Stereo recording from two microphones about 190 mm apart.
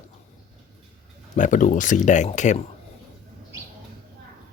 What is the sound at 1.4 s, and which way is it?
Speech, 40° left (ahead or behind).